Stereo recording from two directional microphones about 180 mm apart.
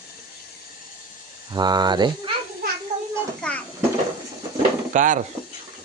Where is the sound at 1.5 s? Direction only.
25° right (ahead or behind).